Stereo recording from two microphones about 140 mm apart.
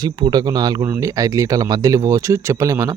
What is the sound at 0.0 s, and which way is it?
Speech, 30° right (ahead or behind).